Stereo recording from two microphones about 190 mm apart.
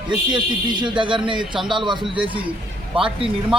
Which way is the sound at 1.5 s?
Centre (ahead or behind).